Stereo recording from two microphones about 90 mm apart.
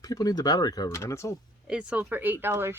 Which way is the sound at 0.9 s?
30° left (ahead or behind).